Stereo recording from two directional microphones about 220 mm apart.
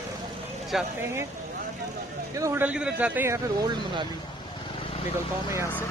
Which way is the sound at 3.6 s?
20° right (ahead or behind).